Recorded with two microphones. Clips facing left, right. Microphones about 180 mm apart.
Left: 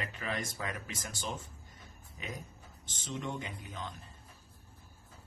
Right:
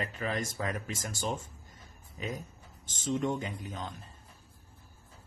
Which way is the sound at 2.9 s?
45° right (ahead or behind).